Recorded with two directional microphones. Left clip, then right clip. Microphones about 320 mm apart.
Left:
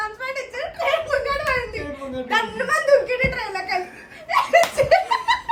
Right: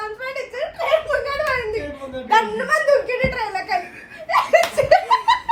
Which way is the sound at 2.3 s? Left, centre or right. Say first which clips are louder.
Right 4 dB; centre.